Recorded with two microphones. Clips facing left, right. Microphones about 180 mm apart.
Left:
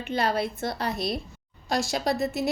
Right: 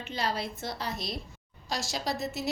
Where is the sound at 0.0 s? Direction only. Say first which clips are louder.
Left 6 dB; 55° left (ahead or behind).